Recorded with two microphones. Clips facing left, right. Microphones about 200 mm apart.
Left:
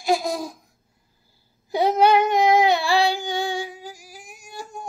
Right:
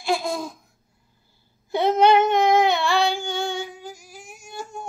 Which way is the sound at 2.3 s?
35° left (ahead or behind).